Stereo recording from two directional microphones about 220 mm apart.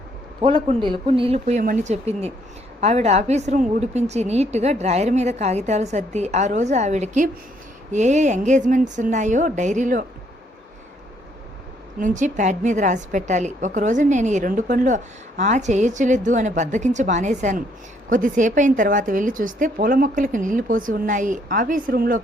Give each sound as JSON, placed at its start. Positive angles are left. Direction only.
{"t": 0.4, "sound": "a woman's voice", "side_deg": -25}
{"t": 11.9, "sound": "a woman's voice", "side_deg": -35}